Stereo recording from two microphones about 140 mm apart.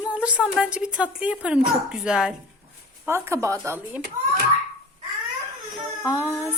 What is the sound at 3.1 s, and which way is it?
Speech, 20° right (ahead or behind).